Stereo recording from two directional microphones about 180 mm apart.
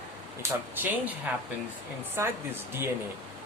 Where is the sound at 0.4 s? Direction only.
15° right (ahead or behind).